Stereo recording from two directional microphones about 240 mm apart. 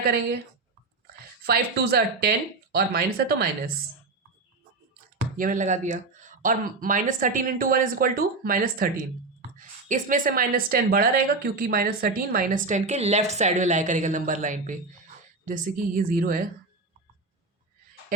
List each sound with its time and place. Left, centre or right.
0.1 s speech: right
5.1 s speech: right